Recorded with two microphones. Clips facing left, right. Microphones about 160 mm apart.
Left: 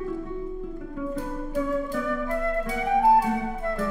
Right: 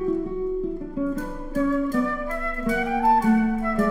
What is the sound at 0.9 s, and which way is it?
Music, 45° right (ahead or behind).